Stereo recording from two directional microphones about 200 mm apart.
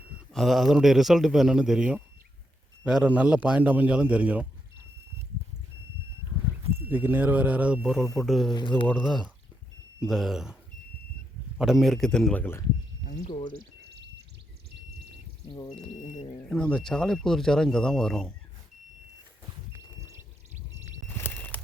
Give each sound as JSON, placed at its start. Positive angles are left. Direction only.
{"t": 0.3, "sound": "a man's voice", "side_deg": 0}
{"t": 6.7, "sound": "a man's voice", "side_deg": -10}
{"t": 13.1, "sound": "speech", "side_deg": 35}
{"t": 15.4, "sound": "speech", "side_deg": 20}
{"t": 16.5, "sound": "speech", "side_deg": 5}
{"t": 21.2, "sound": "a sound", "side_deg": 10}